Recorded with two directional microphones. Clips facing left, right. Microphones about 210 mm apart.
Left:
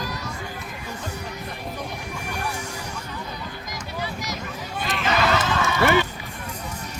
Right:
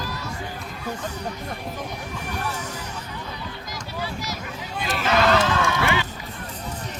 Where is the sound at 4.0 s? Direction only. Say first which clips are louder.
Even; 20° left (ahead or behind).